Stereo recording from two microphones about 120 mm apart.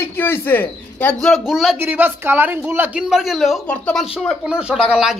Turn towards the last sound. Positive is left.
turn(degrees=-5)  # may be behind; listen again after turning